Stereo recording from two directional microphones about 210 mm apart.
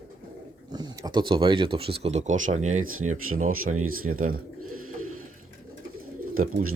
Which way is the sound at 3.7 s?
90° right.